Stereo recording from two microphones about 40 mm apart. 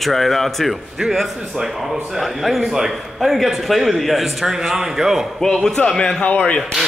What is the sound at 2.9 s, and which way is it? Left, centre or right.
A man's voice, centre.